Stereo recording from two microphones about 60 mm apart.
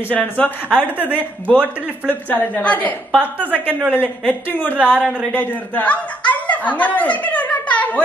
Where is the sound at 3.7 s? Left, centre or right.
Right.